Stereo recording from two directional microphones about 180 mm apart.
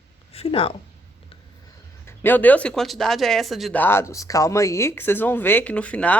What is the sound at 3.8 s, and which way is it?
Speech, 15° left (ahead or behind).